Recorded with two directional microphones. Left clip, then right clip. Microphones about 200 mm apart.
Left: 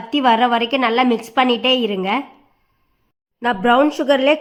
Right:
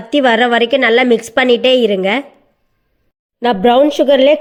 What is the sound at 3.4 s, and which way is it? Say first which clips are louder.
A woman's voice: right 5 dB; 15° right (ahead or behind).